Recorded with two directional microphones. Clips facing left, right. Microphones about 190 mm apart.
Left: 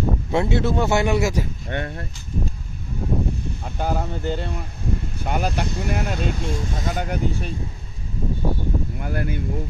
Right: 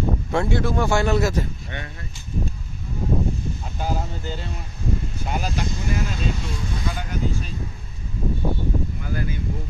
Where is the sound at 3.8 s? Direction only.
55° left (ahead or behind).